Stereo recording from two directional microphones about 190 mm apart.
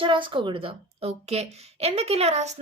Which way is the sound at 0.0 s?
25° right (ahead or behind).